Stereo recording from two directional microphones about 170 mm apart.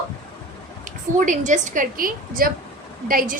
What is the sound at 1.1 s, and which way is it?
A woman's voice, 45° right (ahead or behind).